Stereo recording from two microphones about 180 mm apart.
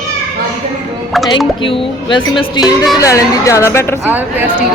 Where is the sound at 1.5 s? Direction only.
30° left (ahead or behind); by 4.0 s 15° left (ahead or behind).